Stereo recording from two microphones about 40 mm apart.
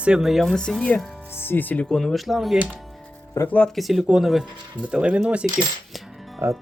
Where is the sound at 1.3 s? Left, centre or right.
Left.